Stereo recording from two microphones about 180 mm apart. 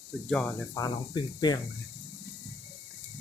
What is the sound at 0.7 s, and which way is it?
Speech, 20° left (ahead or behind).